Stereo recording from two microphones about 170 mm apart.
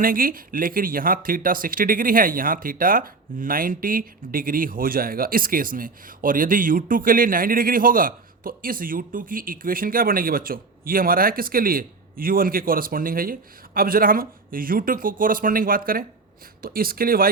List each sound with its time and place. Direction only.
0.0 s speech: 55° right (ahead or behind)